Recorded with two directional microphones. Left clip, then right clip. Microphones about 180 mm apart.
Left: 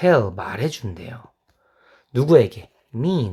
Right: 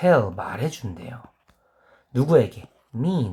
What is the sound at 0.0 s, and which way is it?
Speech, 50° left (ahead or behind).